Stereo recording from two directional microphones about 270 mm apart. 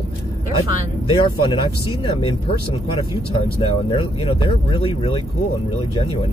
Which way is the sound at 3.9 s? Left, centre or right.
Centre.